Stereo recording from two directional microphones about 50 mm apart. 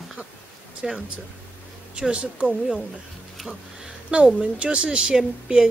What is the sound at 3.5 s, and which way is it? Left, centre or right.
A woman's voice, centre.